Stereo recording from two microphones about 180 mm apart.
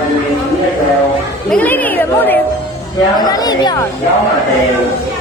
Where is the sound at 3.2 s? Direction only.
20° left (ahead or behind).